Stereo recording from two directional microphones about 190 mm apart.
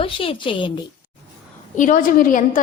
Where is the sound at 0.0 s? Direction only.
30° left (ahead or behind).